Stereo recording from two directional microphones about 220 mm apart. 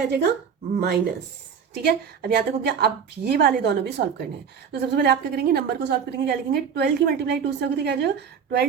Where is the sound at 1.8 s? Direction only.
45° right (ahead or behind).